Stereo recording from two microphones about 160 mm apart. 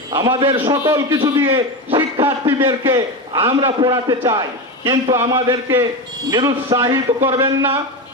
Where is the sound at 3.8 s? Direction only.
25° right (ahead or behind).